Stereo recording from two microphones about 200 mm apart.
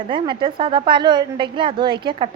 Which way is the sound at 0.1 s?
25° right (ahead or behind).